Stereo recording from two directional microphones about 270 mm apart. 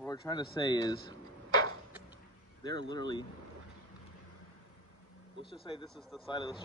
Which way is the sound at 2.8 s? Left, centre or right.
Right.